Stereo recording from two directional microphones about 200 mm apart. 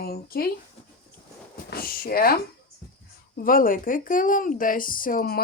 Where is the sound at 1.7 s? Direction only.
50° left (ahead or behind).